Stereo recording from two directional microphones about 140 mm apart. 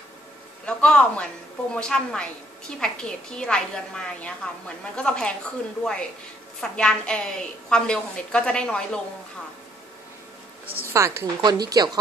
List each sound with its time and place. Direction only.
0.7 s a woman's voice: 5° left (ahead or behind)
10.9 s speech: 20° right (ahead or behind)